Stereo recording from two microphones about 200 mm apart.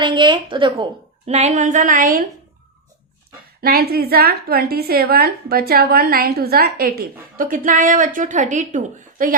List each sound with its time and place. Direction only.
0.0 s a woman's voice: 25° right (ahead or behind); by 2.2 s 45° right (ahead or behind)
3.6 s a woman's voice: 50° right (ahead or behind)